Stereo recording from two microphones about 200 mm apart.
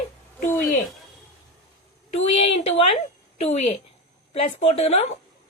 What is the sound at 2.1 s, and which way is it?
A woman's voice, 30° left (ahead or behind).